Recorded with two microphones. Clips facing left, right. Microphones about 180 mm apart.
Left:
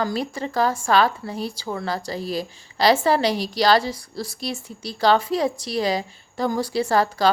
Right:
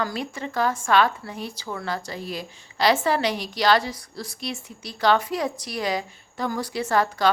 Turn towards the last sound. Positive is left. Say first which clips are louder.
# left 2 dB
turn(degrees=35)  # may be behind; listen again after turning